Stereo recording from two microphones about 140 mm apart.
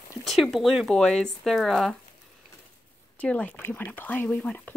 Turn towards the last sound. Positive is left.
turn(degrees=10)  # may be behind; listen again after turning